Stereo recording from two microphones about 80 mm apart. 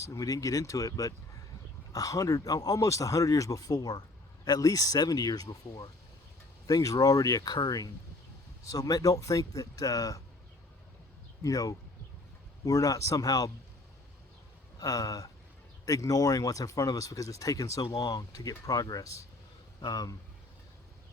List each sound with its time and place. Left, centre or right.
0.0 s speech: left
11.4 s speech: left
14.8 s speech: left